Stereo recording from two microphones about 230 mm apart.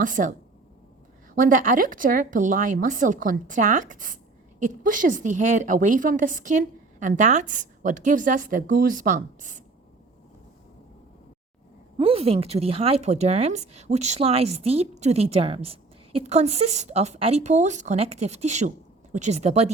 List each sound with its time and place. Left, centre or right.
0.0 s speech: right
1.4 s speech: right
11.9 s a woman's voice: right